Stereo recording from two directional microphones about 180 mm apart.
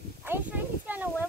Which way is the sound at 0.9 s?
10° right (ahead or behind).